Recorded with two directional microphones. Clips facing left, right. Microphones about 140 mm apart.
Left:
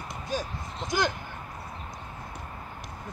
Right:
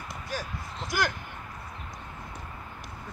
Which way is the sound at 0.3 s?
20° left (ahead or behind).